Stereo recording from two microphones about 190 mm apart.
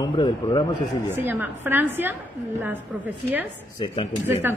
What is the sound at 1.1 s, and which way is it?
A woman's voice, 10° right (ahead or behind).